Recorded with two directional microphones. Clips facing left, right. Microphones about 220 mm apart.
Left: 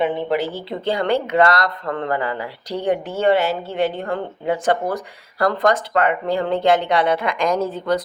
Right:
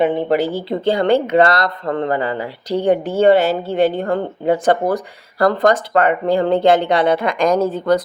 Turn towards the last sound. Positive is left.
turn(degrees=-45)  # may be behind; listen again after turning